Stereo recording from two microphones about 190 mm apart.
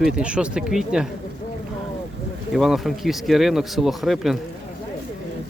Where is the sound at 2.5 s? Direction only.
Centre (ahead or behind).